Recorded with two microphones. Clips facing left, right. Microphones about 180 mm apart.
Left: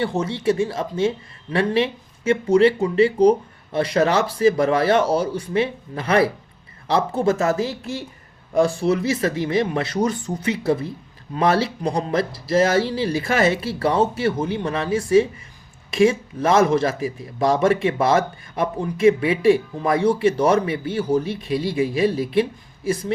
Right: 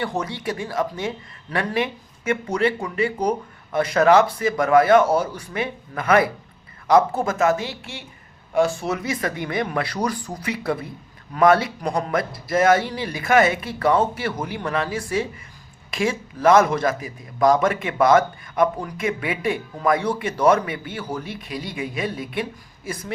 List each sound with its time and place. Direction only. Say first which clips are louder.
0.0 s a man's voice: left 5 dB; 25° left (ahead or behind)